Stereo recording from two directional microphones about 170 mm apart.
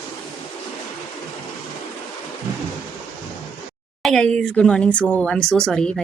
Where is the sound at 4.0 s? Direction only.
5° left (ahead or behind).